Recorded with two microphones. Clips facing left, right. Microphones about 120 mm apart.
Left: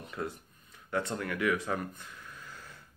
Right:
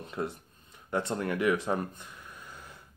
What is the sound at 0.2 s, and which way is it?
Speech, 25° right (ahead or behind).